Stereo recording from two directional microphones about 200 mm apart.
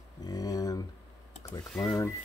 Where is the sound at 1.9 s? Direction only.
15° left (ahead or behind).